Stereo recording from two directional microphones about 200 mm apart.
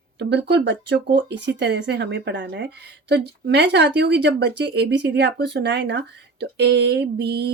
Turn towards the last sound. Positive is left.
turn(degrees=-55)  # may be behind; listen again after turning